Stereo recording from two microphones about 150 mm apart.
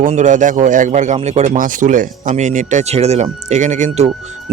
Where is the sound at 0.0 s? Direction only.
55° right (ahead or behind).